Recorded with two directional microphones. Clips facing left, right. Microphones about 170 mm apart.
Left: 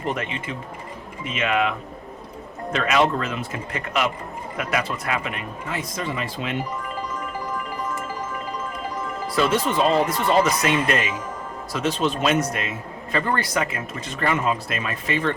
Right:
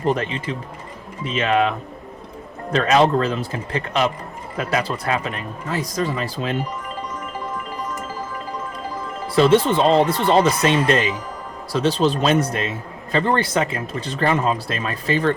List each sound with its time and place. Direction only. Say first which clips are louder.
0.0 s a man's voice: right 6 dB; 35° right (ahead or behind)
2.7 s a man's voice: right 5 dB; 35° right (ahead or behind)
9.2 s a man's voice: right 7 dB; 30° right (ahead or behind)